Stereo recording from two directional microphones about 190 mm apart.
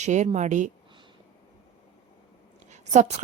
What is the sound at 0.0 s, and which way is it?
Speech, 40° right (ahead or behind).